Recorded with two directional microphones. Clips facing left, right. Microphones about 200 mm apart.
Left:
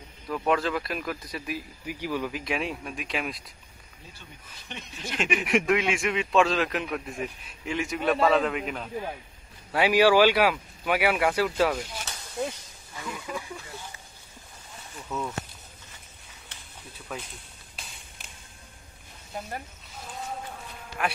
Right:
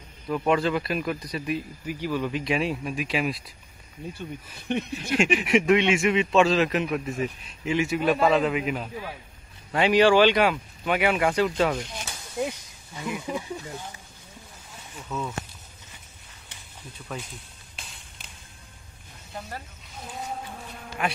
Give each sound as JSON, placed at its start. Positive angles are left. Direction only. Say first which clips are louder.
{"t": 0.3, "sound": "a man's voice", "louder": "right 3 dB", "side_deg": 0}
{"t": 1.9, "sound": "a man's voice", "louder": "right 2 dB", "side_deg": 15}
{"t": 4.6, "sound": "speech", "louder": "right 11 dB", "side_deg": -55}
{"t": 5.4, "sound": "a man's voice", "louder": "right 2 dB", "side_deg": 0}
{"t": 9.7, "sound": "speech", "louder": "right 1 dB", "side_deg": 5}
{"t": 12.1, "sound": "a sound", "louder": "right 3 dB", "side_deg": -10}
{"t": 15.0, "sound": "a man's voice", "louder": "right 1 dB", "side_deg": 0}
{"t": 17.1, "sound": "a man's voice", "louder": "right 1 dB", "side_deg": 5}
{"t": 21.0, "sound": "a man's voice", "louder": "right 1 dB", "side_deg": 0}